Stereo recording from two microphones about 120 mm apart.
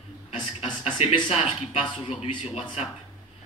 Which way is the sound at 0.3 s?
45° left (ahead or behind).